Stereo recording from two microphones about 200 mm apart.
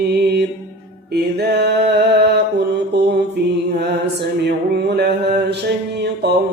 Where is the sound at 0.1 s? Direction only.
55° right (ahead or behind).